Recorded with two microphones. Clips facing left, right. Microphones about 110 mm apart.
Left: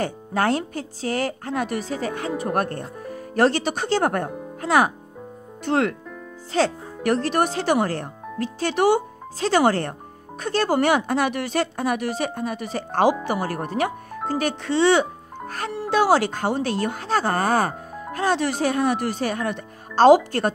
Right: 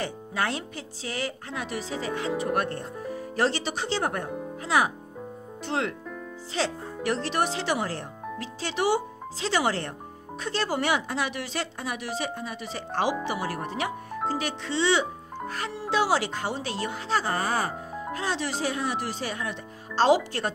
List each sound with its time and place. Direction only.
0.0 s speech: 45° left (ahead or behind)